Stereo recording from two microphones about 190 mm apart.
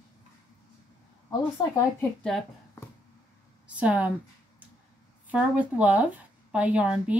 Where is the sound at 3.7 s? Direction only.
5° right (ahead or behind).